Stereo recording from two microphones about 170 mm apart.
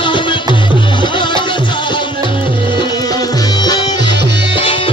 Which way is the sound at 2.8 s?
25° left (ahead or behind).